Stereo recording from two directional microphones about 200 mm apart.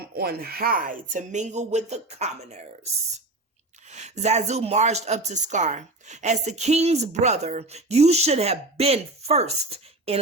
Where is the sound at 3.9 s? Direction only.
35° right (ahead or behind).